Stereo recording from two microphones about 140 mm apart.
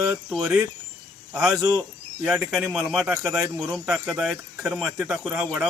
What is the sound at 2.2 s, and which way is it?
Speech, 5° right (ahead or behind).